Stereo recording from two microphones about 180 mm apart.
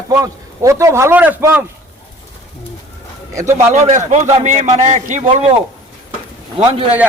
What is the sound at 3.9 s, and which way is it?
A man's voice, 40° right (ahead or behind).